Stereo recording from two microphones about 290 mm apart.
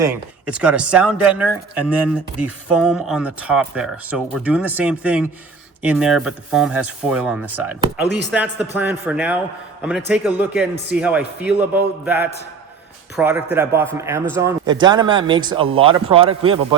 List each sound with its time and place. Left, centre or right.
0.0 s speech: centre